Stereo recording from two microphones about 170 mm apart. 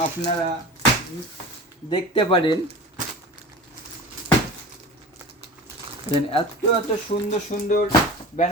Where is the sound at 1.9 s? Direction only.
30° left (ahead or behind).